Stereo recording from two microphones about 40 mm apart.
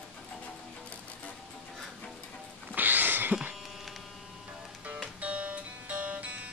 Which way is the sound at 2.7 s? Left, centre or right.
Right.